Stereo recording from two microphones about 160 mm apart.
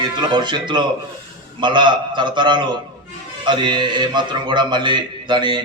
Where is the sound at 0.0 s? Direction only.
30° right (ahead or behind).